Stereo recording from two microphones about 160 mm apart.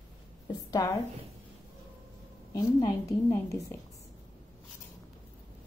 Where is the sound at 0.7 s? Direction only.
20° left (ahead or behind).